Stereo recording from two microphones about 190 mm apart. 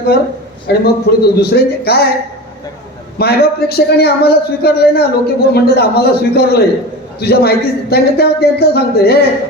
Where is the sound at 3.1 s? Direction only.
55° left (ahead or behind).